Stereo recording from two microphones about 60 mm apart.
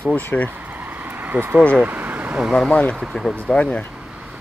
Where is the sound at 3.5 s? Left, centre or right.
Centre.